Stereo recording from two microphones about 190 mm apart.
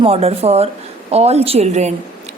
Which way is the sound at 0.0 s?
30° right (ahead or behind).